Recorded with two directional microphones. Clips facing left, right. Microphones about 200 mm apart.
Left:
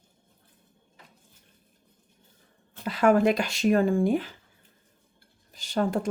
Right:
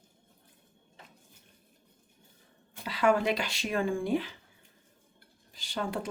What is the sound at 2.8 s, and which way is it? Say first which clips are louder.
Speech: left 6 dB; 45° left (ahead or behind).